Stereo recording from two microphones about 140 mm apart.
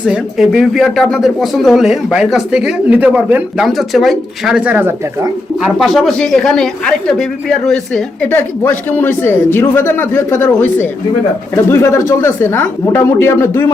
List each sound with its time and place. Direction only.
0.0 s speech: 5° right (ahead or behind)
3.7 s speech: centre (ahead or behind)
5.6 s a woman's voice: centre (ahead or behind); by 13.7 s 20° left (ahead or behind)